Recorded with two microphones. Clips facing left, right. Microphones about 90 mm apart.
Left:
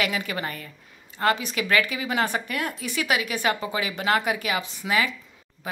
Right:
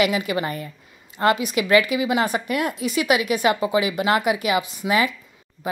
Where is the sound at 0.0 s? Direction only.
15° right (ahead or behind).